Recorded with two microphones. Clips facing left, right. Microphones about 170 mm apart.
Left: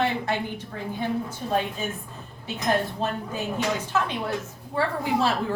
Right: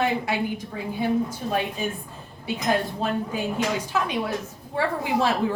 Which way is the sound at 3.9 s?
10° right (ahead or behind).